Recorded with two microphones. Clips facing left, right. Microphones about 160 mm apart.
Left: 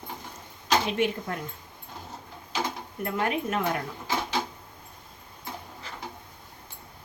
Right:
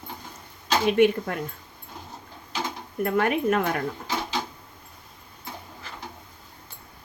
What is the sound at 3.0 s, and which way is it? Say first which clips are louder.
Speech: right 5 dB; 65° right (ahead or behind).